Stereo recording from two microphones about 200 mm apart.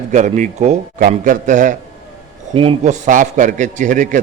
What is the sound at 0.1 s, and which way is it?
A man's voice, 35° right (ahead or behind).